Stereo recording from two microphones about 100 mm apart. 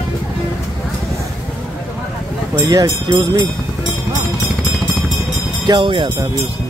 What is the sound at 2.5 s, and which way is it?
Speech, 40° right (ahead or behind).